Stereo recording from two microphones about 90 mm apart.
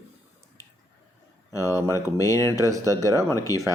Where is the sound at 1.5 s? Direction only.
40° left (ahead or behind).